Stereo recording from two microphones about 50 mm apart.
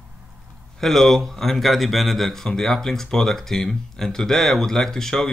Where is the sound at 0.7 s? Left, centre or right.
Centre.